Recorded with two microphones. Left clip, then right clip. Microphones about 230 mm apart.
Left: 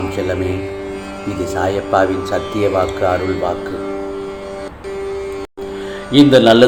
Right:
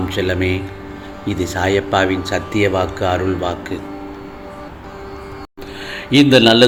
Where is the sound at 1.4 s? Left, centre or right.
Right.